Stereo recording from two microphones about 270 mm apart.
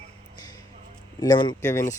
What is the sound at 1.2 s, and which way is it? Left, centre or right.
Speech, centre.